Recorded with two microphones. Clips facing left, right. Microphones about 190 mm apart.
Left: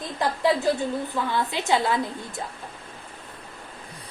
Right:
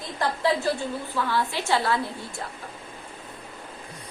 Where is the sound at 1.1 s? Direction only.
20° left (ahead or behind).